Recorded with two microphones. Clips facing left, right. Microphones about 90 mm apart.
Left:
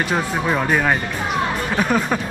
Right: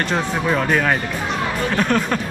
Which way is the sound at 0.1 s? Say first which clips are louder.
Even; 5° left (ahead or behind).